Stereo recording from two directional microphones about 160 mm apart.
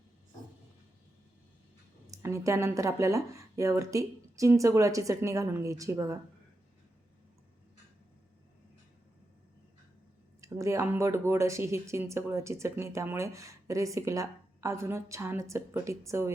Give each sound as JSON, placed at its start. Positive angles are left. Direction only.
{"t": 2.0, "sound": "speech", "side_deg": -20}
{"t": 10.4, "sound": "speech", "side_deg": -20}